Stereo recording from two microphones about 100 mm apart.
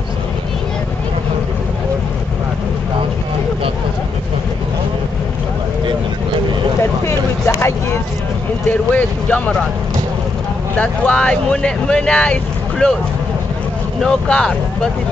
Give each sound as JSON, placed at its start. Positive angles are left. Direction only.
{"t": 6.8, "sound": "vehicle", "side_deg": 25}
{"t": 8.6, "sound": "speech", "side_deg": 15}
{"t": 10.8, "sound": "speech", "side_deg": 10}
{"t": 14.0, "sound": "speech", "side_deg": 5}